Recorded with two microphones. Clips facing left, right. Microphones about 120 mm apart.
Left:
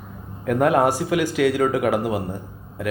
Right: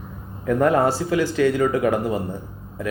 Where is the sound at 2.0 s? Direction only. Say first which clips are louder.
Even; 10° left (ahead or behind).